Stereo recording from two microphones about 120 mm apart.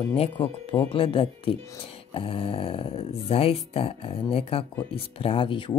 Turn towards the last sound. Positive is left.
turn(degrees=45)  # may be behind; listen again after turning